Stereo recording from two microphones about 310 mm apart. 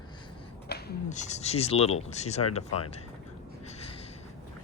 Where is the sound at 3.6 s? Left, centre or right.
Centre.